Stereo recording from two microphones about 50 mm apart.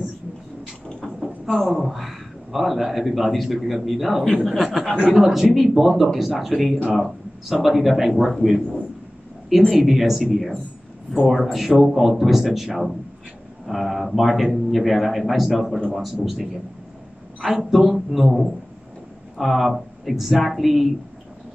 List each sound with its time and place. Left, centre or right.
1.2 s speech: centre
4.9 s speech: right
5.2 s speech: centre
9.6 s speech: centre
17.6 s speech: centre